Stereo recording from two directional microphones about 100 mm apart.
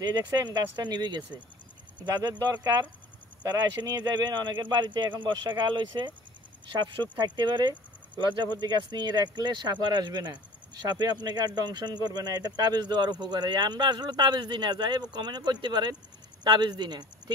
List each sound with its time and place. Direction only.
0.0 s speech: 40° right (ahead or behind)
2.2 s speech: 40° right (ahead or behind)
7.3 s speech: 45° right (ahead or behind)